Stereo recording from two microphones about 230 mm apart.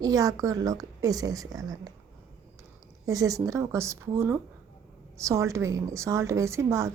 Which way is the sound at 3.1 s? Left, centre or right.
Centre.